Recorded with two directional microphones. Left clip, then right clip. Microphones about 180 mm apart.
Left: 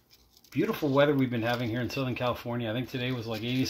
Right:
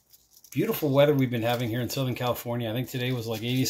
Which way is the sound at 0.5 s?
Centre (ahead or behind).